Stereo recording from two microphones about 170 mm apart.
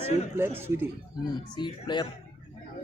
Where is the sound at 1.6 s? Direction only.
25° left (ahead or behind).